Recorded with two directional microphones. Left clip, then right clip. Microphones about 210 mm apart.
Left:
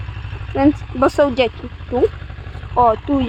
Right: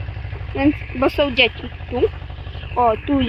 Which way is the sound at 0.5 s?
15° left (ahead or behind).